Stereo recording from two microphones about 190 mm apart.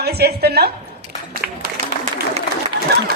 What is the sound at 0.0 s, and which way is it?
Speech, 55° right (ahead or behind).